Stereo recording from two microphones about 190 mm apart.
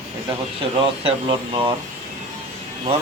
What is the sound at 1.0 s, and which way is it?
Speech, 25° right (ahead or behind).